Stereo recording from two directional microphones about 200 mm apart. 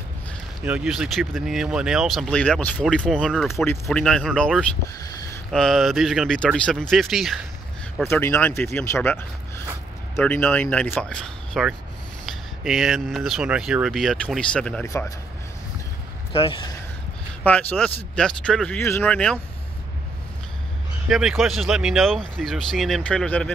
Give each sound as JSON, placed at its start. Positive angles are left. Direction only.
{"t": 0.7, "sound": "speech", "side_deg": -5}
{"t": 8.0, "sound": "speech", "side_deg": 10}
{"t": 14.9, "sound": "speech", "side_deg": 15}
{"t": 16.3, "sound": "speech", "side_deg": 25}
{"t": 17.4, "sound": "speech", "side_deg": 5}
{"t": 21.1, "sound": "speech", "side_deg": 0}